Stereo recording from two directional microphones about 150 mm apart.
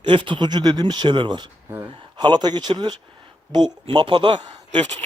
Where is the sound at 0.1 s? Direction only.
35° right (ahead or behind).